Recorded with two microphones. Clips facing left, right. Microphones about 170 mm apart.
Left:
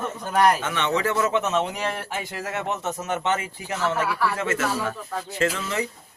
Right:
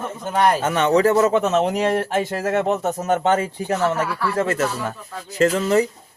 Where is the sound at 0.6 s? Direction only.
40° right (ahead or behind).